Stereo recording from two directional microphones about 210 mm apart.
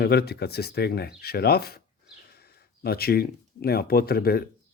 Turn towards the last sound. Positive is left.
turn(degrees=45)  # may be behind; listen again after turning